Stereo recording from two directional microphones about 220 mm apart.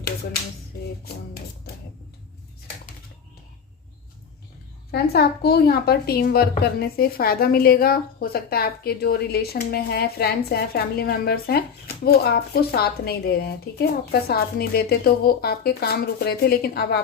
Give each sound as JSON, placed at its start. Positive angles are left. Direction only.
{"t": 1.0, "sound": "a woman's voice", "side_deg": 45}
{"t": 4.9, "sound": "a woman's voice", "side_deg": 45}